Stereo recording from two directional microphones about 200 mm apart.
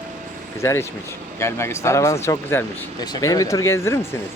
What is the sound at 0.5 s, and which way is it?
Speech, 15° left (ahead or behind).